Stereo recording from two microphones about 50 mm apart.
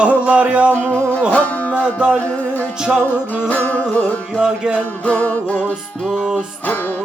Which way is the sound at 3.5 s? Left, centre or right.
Left.